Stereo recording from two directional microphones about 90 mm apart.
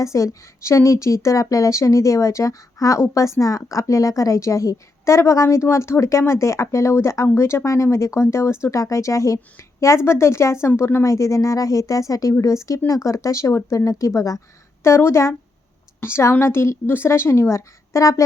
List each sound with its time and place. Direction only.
0.0 s a woman's voice: 35° left (ahead or behind)
11.0 s a woman's voice: 35° left (ahead or behind)